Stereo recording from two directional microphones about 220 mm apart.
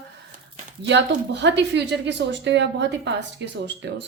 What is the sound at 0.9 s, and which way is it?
A woman's voice, 55° right (ahead or behind).